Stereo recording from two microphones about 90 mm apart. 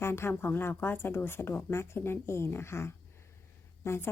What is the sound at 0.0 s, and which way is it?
A woman's voice, 30° left (ahead or behind).